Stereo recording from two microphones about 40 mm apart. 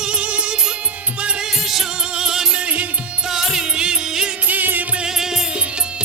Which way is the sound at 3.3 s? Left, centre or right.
Centre.